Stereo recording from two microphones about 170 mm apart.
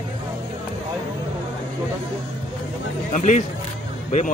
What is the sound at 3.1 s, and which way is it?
Speech, 45° left (ahead or behind).